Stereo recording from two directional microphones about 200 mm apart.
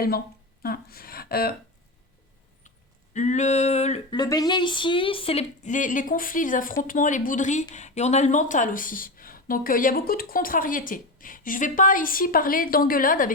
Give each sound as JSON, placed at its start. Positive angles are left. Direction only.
{"t": 0.6, "sound": "a woman's voice", "side_deg": 50}
{"t": 2.6, "sound": "a sound", "side_deg": 35}
{"t": 4.1, "sound": "a woman's voice", "side_deg": 20}